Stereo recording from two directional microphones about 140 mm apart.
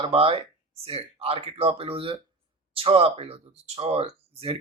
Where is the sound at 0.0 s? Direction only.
40° right (ahead or behind).